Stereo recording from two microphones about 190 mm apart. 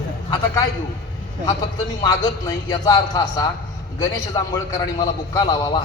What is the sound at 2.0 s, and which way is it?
A man's voice, 20° left (ahead or behind).